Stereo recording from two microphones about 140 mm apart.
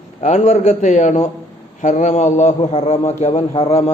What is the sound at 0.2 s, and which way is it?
A man's voice, 55° left (ahead or behind).